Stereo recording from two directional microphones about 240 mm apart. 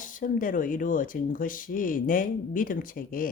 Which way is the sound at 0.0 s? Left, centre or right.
Left.